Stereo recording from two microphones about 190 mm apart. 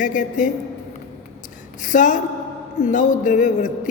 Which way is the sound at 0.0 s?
45° left (ahead or behind).